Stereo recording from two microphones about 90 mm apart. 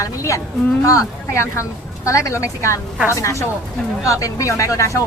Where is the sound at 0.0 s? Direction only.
35° left (ahead or behind).